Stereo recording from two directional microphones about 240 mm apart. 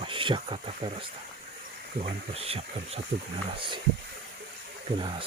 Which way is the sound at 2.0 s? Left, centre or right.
Right.